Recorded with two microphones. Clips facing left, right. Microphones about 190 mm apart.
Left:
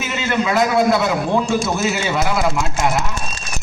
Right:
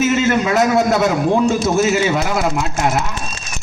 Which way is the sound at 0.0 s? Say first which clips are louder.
Right 6 dB; 45° right (ahead or behind).